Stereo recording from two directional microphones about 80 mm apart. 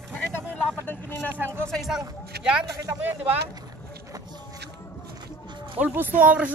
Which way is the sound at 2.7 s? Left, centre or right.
Right.